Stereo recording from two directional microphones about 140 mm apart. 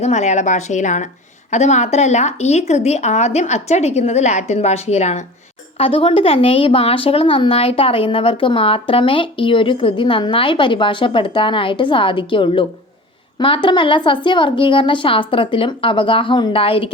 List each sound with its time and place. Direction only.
0.0 s a woman's voice: 55° left (ahead or behind)